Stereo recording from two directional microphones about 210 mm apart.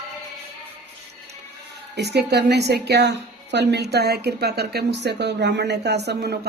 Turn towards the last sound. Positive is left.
turn(degrees=-50)  # may be behind; listen again after turning